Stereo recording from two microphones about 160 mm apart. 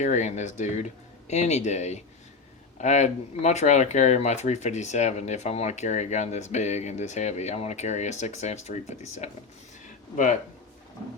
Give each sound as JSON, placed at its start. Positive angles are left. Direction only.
{"t": 0.0, "sound": "speech", "side_deg": 45}